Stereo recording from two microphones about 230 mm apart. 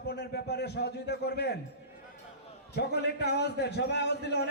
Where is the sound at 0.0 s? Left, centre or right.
Left.